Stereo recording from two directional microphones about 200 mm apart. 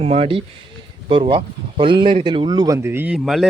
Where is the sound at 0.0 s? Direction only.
30° right (ahead or behind).